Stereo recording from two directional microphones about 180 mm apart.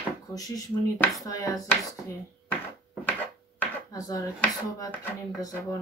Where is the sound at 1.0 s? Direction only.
20° left (ahead or behind).